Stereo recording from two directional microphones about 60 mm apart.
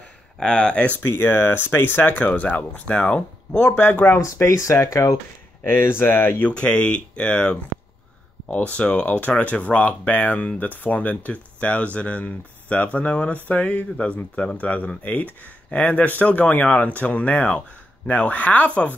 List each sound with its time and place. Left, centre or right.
0.4 s speech: centre
3.6 s speech: left
4.2 s speech: left
5.7 s speech: left
6.5 s speech: centre